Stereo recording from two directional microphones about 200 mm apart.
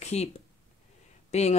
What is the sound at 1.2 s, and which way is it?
Speech, 35° left (ahead or behind).